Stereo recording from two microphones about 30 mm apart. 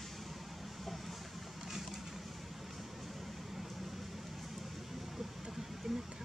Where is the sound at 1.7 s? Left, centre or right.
Centre.